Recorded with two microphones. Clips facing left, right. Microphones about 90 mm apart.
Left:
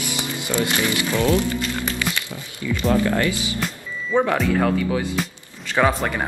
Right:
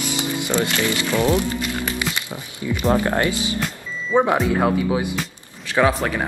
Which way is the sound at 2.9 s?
35° right (ahead or behind).